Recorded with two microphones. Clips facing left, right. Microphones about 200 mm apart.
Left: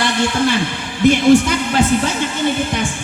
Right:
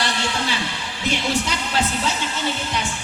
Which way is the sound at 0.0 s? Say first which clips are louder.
Left 8 dB; 50° left (ahead or behind).